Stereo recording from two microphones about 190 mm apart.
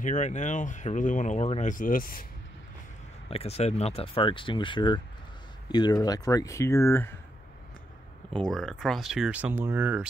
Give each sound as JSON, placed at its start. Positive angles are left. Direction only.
{"t": 0.0, "sound": "speech", "side_deg": 40}
{"t": 3.3, "sound": "speech", "side_deg": 30}
{"t": 8.4, "sound": "speech", "side_deg": 5}